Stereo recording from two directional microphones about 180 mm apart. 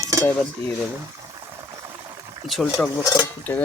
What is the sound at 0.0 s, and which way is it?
Cutlery, 15° right (ahead or behind).